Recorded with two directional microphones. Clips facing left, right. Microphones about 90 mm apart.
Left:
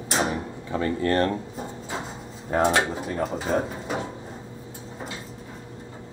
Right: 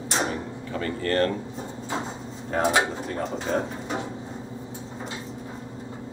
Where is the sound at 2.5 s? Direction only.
Centre (ahead or behind).